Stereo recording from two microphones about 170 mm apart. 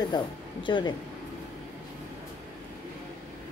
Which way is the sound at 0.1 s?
30° left (ahead or behind).